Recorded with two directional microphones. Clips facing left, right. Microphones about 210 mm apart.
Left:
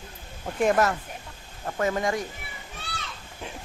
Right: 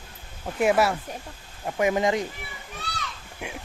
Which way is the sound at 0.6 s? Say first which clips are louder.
Right 1 dB; 10° right (ahead or behind).